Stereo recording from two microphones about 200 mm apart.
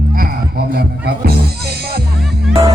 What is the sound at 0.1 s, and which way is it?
Music, 45° right (ahead or behind).